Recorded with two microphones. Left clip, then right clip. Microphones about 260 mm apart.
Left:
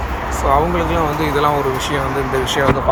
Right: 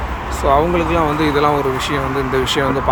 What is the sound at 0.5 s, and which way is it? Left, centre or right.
Speech, centre.